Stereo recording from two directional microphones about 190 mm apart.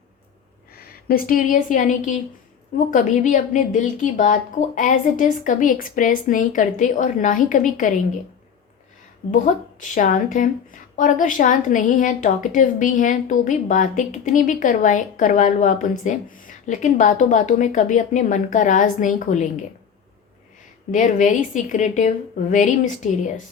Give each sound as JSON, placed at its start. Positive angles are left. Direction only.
{"t": 0.7, "sound": "a woman's voice", "side_deg": 55}
{"t": 9.2, "sound": "a woman's voice", "side_deg": 40}
{"t": 20.9, "sound": "a woman's voice", "side_deg": 40}